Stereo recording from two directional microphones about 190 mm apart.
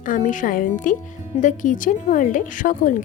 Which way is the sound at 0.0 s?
45° left (ahead or behind).